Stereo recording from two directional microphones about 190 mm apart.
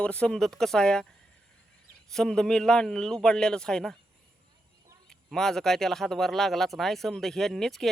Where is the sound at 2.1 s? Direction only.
5° left (ahead or behind).